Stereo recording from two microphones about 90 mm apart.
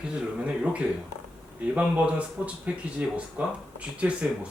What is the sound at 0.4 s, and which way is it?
Speech, 15° right (ahead or behind).